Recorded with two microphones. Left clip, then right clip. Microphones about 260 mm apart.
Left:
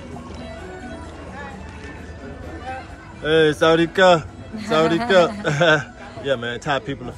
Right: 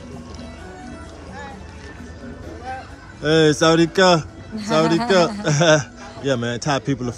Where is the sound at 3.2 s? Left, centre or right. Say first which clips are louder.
Even; centre.